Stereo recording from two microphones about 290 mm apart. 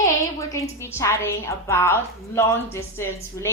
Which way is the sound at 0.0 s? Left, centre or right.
Centre.